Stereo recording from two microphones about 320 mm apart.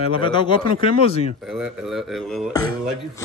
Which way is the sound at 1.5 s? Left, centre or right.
Centre.